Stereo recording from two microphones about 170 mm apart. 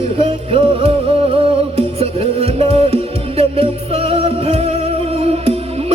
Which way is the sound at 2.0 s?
35° right (ahead or behind).